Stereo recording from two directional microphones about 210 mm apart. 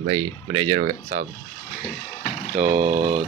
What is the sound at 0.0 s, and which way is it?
Speech, 25° right (ahead or behind).